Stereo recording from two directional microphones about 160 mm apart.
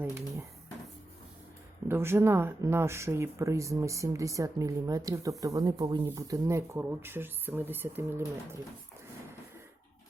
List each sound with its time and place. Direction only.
0.0 s speech: 15° right (ahead or behind)
1.9 s speech: 15° right (ahead or behind)